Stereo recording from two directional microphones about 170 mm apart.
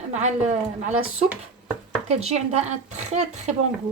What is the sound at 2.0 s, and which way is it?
Speech, 40° right (ahead or behind).